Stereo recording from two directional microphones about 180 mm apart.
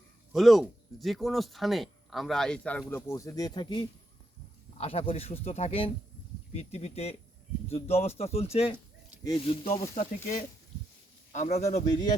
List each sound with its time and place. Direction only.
0.3 s speech: centre (ahead or behind)
2.9 s speech: 15° left (ahead or behind); by 9.8 s 35° left (ahead or behind)
10.0 s speech: 45° left (ahead or behind)